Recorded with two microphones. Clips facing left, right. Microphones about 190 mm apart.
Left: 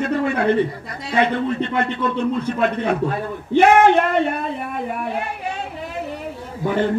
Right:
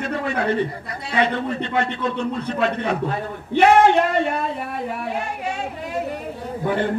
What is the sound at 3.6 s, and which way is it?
Speech, 55° left (ahead or behind).